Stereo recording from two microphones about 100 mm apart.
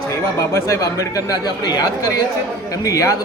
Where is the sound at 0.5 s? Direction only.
30° left (ahead or behind).